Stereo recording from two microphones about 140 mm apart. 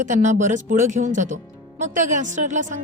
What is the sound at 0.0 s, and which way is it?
A woman's voice, 60° right (ahead or behind).